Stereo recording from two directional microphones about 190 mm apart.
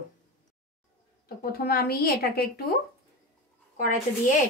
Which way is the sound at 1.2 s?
50° left (ahead or behind).